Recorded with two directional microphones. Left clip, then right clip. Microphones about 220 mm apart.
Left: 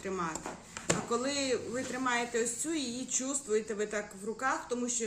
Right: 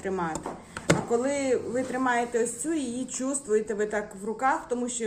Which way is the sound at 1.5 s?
15° left (ahead or behind).